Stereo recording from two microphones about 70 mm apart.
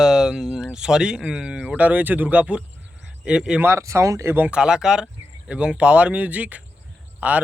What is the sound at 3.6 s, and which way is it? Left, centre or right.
Speech, right.